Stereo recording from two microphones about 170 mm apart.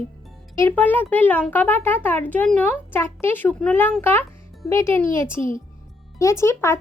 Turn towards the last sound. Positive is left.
turn(degrees=15)  # may be behind; listen again after turning